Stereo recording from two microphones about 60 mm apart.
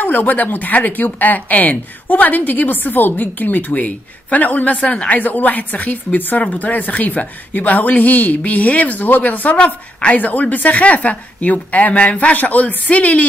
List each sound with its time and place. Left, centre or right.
0.0 s speech: left